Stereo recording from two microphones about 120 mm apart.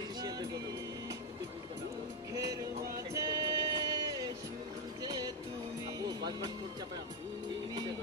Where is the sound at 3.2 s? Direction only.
30° right (ahead or behind).